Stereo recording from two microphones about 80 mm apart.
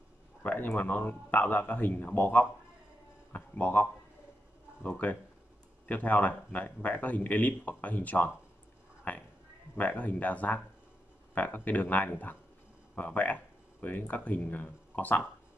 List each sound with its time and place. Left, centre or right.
0.4 s a man's voice: left
9.1 s a sound: left
9.8 s a man's voice: centre